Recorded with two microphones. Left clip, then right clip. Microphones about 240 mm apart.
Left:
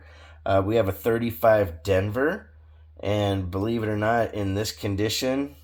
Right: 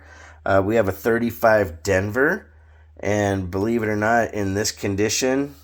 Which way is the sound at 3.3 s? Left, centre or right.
Right.